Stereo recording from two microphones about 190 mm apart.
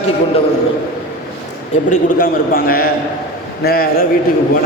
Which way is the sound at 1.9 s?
45° left (ahead or behind).